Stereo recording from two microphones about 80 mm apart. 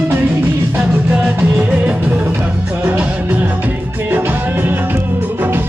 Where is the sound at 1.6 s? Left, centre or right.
Centre.